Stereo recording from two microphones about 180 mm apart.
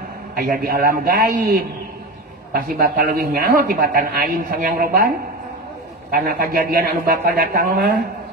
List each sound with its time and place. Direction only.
0.4 s a man's voice: 55° right (ahead or behind)
6.1 s a man's voice: 55° right (ahead or behind)